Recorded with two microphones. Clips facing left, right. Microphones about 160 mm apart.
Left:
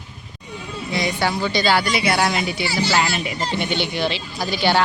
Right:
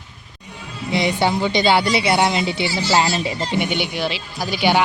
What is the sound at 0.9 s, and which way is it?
A woman's voice, 25° right (ahead or behind).